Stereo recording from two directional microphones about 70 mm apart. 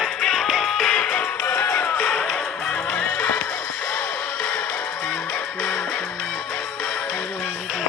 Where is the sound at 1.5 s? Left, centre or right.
Left.